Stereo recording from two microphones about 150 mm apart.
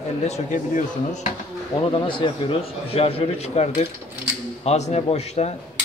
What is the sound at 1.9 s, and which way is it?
A man's voice, 35° left (ahead or behind).